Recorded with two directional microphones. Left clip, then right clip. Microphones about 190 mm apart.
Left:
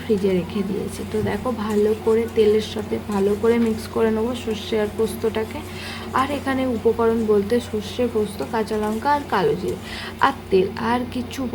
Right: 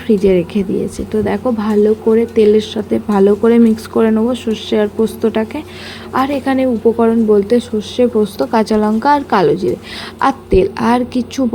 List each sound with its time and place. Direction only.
0.3 s a woman's voice: 30° right (ahead or behind)